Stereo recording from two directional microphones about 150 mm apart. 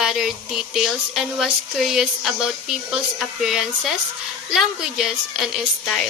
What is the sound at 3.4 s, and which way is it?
Speech, centre (ahead or behind).